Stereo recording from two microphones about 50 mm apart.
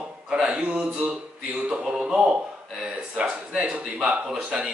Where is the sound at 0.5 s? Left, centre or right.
Right.